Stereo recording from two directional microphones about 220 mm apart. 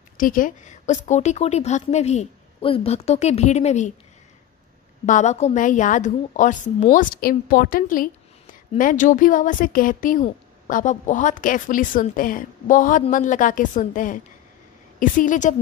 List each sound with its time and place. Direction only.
0.2 s speech: 35° left (ahead or behind)
5.0 s speech: 35° left (ahead or behind)